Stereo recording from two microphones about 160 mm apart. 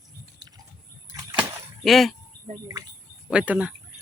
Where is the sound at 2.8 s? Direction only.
25° right (ahead or behind).